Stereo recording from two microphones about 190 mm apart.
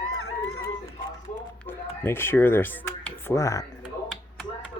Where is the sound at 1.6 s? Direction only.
10° left (ahead or behind).